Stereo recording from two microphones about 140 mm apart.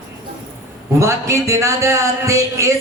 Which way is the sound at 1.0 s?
20° right (ahead or behind).